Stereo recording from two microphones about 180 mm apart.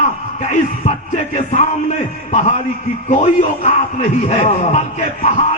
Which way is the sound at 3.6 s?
40° left (ahead or behind).